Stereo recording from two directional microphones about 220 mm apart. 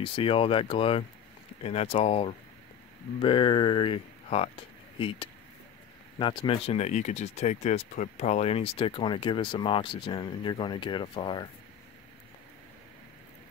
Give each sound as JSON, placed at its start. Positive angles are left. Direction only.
{"t": 0.0, "sound": "speech", "side_deg": 25}